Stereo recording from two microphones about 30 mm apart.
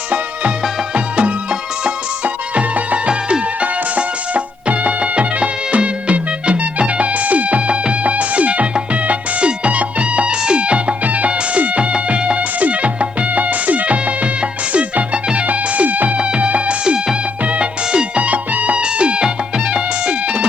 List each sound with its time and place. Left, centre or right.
0.9 s music: right
3.1 s music: right
3.6 s music: right
11.0 s music: right
11.3 s music: right
12.5 s music: right
15.4 s music: right
16.1 s music: right
16.8 s music: right
17.4 s music: right
18.3 s music: right
18.8 s music: right